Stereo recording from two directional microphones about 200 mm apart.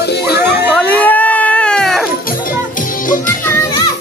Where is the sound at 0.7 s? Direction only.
5° left (ahead or behind).